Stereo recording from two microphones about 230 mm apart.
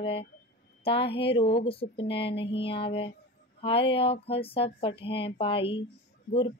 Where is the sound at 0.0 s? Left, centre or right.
Left.